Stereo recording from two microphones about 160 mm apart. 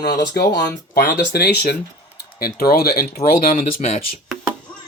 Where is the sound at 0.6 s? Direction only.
80° left.